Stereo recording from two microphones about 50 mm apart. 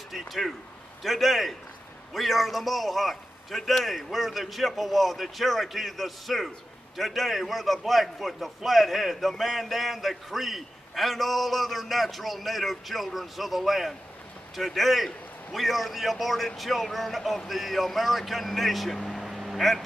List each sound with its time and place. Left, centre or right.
0.1 s a man's voice: centre